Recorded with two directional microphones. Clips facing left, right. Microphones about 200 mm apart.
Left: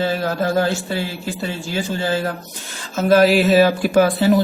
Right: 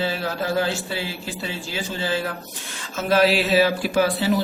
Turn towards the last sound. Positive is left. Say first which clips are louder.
# left 6 dB
turn(degrees=50)  # may be behind; listen again after turning